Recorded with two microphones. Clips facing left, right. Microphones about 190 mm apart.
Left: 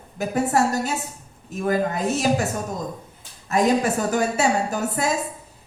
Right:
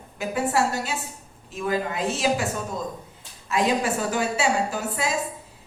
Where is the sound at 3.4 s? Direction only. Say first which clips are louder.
Left 4 dB; 40° left (ahead or behind).